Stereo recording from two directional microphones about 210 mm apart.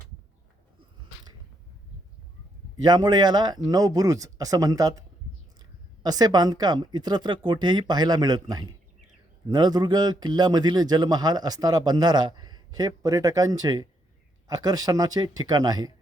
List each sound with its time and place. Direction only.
2.8 s a man's voice: 20° right (ahead or behind)